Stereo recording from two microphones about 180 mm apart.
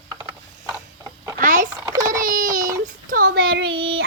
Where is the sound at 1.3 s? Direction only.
45° right (ahead or behind).